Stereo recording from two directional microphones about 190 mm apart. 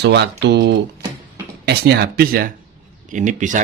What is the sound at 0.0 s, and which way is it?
Speech, 65° right (ahead or behind).